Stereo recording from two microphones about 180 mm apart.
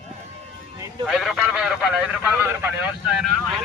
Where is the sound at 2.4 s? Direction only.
10° right (ahead or behind).